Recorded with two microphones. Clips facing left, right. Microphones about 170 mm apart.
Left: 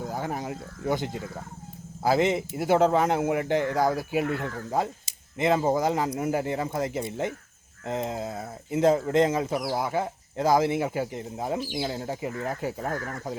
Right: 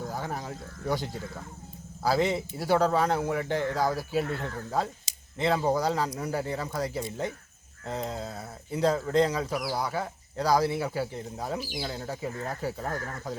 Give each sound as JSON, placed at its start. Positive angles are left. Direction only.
{"t": 0.1, "sound": "speech", "side_deg": 15}
{"t": 2.0, "sound": "speech", "side_deg": 20}